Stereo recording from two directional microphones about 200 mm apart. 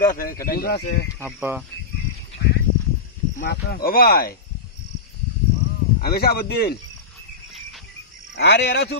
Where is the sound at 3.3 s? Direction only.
50° left (ahead or behind).